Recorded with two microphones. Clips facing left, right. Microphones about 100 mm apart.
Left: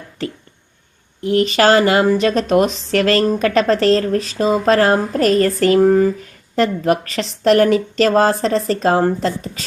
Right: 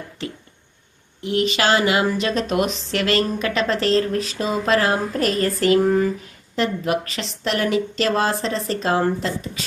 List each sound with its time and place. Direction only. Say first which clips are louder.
1.2 s a woman's voice: left 6 dB; 40° left (ahead or behind)